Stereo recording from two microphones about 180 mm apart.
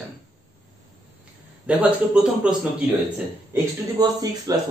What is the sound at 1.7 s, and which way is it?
Speech, 10° right (ahead or behind).